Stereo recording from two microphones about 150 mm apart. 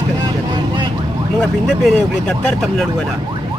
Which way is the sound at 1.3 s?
5° left (ahead or behind).